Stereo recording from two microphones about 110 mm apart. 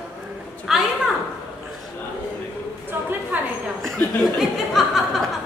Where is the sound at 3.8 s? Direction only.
Centre (ahead or behind).